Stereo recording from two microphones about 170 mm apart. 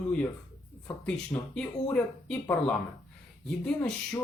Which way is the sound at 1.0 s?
5° left (ahead or behind).